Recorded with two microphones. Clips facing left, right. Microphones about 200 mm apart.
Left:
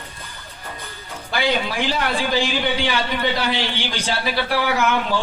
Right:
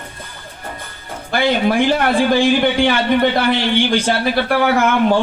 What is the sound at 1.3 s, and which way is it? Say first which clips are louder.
Speech: right 7 dB; 55° right (ahead or behind).